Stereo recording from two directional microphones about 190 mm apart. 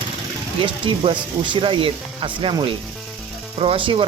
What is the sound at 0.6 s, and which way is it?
Speech, 25° right (ahead or behind).